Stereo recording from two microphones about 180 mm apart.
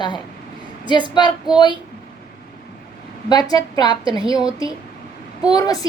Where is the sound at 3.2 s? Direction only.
20° left (ahead or behind).